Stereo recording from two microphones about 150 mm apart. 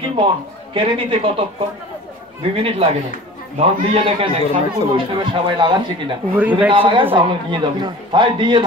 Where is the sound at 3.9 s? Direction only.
40° right (ahead or behind).